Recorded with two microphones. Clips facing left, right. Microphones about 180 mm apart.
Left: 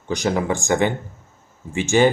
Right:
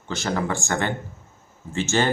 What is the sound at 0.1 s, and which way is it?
Speech, 15° left (ahead or behind).